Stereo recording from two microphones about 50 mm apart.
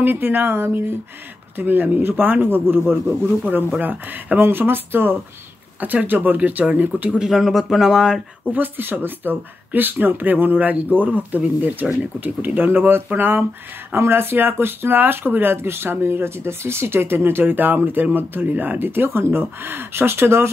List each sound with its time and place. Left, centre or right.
0.0 s speech: right
0.6 s speech: right
1.6 s speech: right
3.8 s speech: right
4.4 s speech: right
5.8 s speech: right
7.2 s speech: centre
8.5 s speech: right